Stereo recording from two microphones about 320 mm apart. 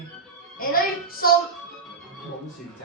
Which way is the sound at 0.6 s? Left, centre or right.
Left.